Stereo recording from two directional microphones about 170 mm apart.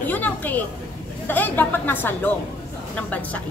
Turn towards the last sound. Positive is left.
turn(degrees=10)  # may be behind; listen again after turning